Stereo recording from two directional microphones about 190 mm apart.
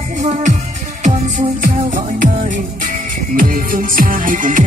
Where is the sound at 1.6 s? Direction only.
45° right (ahead or behind).